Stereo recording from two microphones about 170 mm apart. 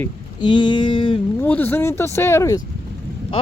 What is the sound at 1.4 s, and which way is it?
Speech, 10° left (ahead or behind).